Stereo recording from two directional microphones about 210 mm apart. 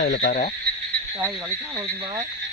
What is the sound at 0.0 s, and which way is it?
Frog, 55° left (ahead or behind).